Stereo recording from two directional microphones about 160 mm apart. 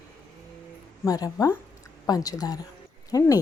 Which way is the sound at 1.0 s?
20° left (ahead or behind).